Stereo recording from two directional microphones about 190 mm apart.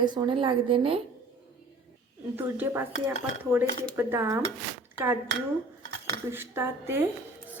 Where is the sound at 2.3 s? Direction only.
10° right (ahead or behind).